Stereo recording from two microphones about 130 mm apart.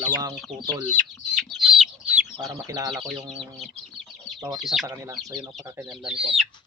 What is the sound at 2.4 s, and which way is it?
Speech, 30° right (ahead or behind).